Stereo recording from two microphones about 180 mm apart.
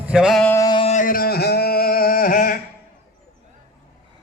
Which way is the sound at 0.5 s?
20° left (ahead or behind).